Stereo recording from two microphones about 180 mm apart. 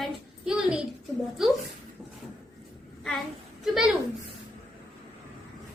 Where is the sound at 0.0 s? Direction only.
5° right (ahead or behind).